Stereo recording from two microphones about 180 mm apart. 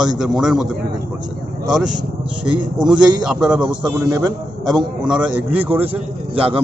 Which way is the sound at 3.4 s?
5° right (ahead or behind).